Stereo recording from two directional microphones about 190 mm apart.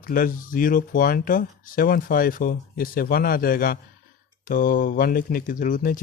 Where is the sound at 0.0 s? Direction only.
45° left (ahead or behind).